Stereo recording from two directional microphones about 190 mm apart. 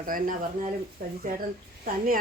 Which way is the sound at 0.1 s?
50° right (ahead or behind).